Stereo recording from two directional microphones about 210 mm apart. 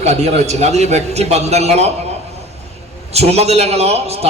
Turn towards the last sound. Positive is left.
turn(degrees=-30)  # may be behind; listen again after turning